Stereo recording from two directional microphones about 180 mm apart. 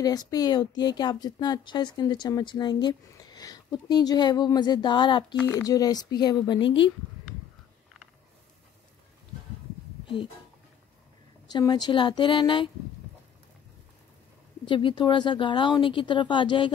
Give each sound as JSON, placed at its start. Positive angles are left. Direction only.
{"t": 0.0, "sound": "speech", "side_deg": 20}
{"t": 11.5, "sound": "speech", "side_deg": 25}
{"t": 14.7, "sound": "speech", "side_deg": 25}